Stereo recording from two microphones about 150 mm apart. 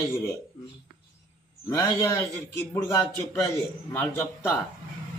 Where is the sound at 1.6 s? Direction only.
25° left (ahead or behind).